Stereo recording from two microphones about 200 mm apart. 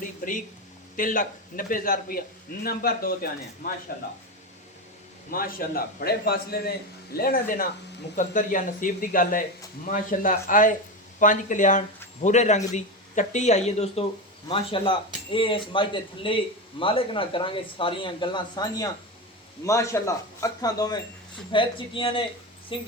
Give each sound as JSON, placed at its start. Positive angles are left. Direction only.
{"t": 0.9, "sound": "a man's voice", "side_deg": 40}
{"t": 5.3, "sound": "a man's voice", "side_deg": 45}